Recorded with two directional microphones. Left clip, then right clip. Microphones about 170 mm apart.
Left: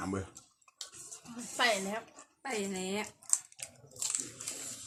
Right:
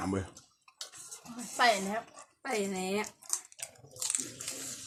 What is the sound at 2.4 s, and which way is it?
Speech, 5° left (ahead or behind).